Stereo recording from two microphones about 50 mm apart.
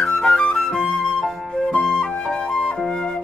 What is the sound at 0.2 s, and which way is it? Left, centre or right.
Flute, centre.